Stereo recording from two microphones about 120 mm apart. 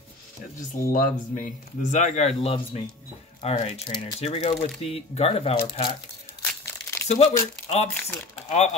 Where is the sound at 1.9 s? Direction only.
80° left.